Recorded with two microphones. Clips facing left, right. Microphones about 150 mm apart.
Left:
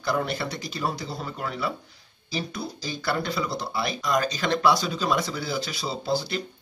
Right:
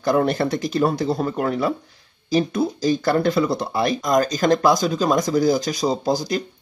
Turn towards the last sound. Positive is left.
turn(degrees=-40)  # may be behind; listen again after turning